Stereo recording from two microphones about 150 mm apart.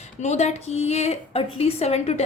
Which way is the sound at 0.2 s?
50° left (ahead or behind).